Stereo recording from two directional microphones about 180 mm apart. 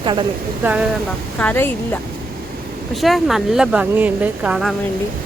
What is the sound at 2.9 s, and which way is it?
Speech, centre (ahead or behind).